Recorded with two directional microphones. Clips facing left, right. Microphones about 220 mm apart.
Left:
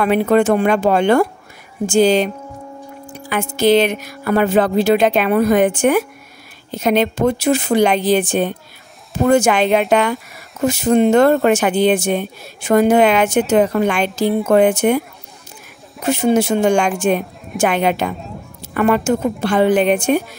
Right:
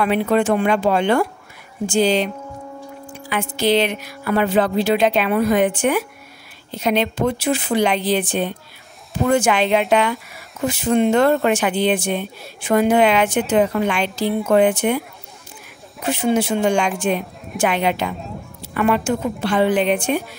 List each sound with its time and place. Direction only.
0.0 s speech: 45° left (ahead or behind)
16.0 s speech: 45° left (ahead or behind)